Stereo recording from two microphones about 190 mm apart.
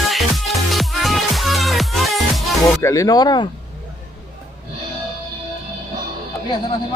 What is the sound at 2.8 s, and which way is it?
Speech, 15° left (ahead or behind).